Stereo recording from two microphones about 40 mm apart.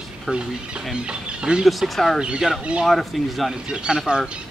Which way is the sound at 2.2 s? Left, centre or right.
Right.